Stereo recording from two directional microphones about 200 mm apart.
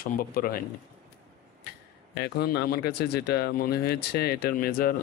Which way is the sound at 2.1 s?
50° left (ahead or behind).